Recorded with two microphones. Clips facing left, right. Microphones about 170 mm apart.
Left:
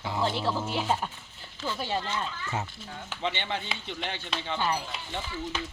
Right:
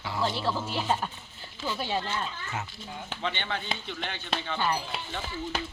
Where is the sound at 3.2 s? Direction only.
20° left (ahead or behind).